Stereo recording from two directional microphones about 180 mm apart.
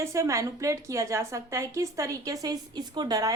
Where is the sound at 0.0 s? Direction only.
15° right (ahead or behind).